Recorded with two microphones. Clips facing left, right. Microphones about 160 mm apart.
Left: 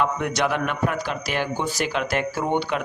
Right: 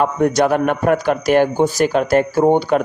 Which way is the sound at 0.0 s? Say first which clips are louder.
Right 8 dB; 40° right (ahead or behind).